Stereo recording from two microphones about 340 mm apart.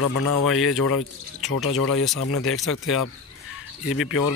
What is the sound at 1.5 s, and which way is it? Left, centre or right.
Speech, left.